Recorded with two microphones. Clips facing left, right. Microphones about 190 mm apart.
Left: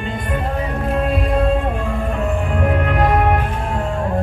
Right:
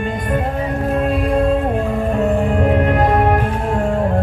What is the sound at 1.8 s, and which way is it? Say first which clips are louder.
Music: right 4 dB; 35° right (ahead or behind).